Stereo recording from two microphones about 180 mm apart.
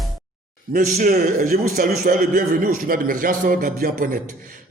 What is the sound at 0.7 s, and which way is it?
A man's voice, 50° right (ahead or behind).